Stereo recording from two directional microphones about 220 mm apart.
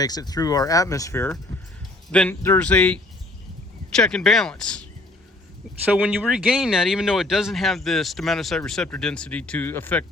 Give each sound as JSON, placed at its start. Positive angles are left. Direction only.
{"t": 0.0, "sound": "speech", "side_deg": 15}
{"t": 6.0, "sound": "speech", "side_deg": -5}